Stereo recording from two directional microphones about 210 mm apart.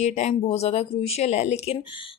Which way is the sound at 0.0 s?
30° left (ahead or behind).